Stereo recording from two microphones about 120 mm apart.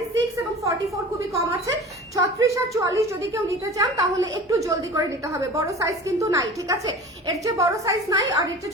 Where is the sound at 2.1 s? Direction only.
25° right (ahead or behind).